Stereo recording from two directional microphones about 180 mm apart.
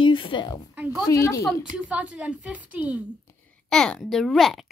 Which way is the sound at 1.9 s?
5° right (ahead or behind).